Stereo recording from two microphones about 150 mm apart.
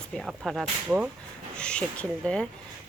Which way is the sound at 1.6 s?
5° left (ahead or behind).